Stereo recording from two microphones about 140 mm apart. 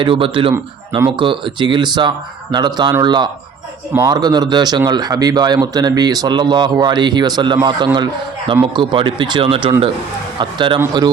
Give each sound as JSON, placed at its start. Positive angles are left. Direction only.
{"t": 0.0, "sound": "speech", "side_deg": -40}
{"t": 0.5, "sound": "a man's voice", "side_deg": -20}
{"t": 1.1, "sound": "a man's voice", "side_deg": -35}